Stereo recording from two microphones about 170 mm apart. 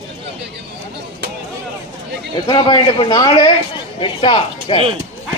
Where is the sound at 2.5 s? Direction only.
25° left (ahead or behind).